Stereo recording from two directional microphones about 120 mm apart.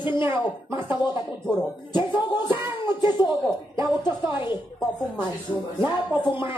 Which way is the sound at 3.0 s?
40° left (ahead or behind).